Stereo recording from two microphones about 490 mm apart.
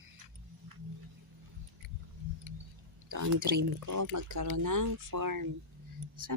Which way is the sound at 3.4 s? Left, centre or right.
Centre.